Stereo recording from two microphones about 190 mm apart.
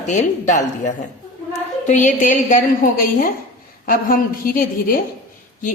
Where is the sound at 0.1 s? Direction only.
40° left (ahead or behind).